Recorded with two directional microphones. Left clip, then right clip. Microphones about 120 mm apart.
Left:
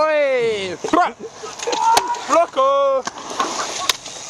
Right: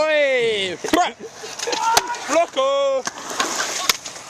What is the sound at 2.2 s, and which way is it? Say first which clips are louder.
Speech: left 5 dB; 15° right (ahead or behind).